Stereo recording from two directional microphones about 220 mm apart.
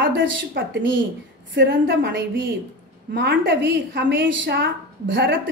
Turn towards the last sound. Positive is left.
turn(degrees=-55)  # may be behind; listen again after turning